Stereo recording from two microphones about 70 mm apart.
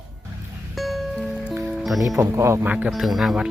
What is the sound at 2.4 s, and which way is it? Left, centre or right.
Speech, right.